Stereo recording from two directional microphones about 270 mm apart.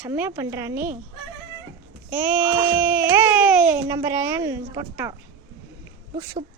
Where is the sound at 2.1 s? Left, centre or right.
Centre.